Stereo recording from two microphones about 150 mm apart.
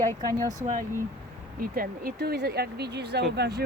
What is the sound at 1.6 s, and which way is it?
Speech, 75° right (ahead or behind).